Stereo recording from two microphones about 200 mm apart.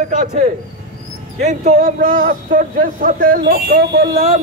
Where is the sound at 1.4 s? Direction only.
35° right (ahead or behind); by 4.1 s 55° right (ahead or behind).